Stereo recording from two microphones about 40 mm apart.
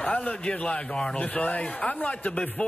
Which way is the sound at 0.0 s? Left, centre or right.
Left.